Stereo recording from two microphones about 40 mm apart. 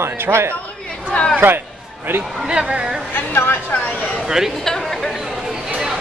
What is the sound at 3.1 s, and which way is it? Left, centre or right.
Speech, left.